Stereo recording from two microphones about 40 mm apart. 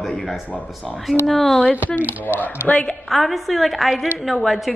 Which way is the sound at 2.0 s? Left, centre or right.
Left.